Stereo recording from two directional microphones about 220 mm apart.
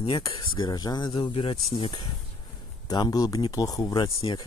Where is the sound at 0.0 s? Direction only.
20° left (ahead or behind).